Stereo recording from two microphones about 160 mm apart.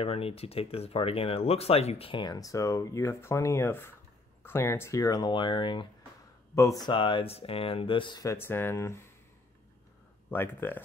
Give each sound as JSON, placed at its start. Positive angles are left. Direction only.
{"t": 0.0, "sound": "speech", "side_deg": 40}
{"t": 6.5, "sound": "speech", "side_deg": 20}
{"t": 10.3, "sound": "speech", "side_deg": 10}